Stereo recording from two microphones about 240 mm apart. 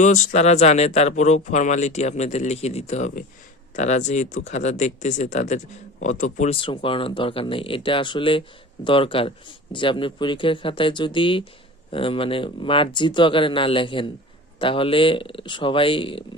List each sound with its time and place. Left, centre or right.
0.0 s speech: left